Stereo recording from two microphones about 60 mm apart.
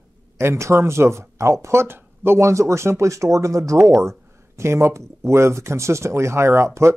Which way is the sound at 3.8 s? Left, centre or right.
Right.